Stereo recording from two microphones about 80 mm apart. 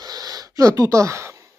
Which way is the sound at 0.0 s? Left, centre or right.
Right.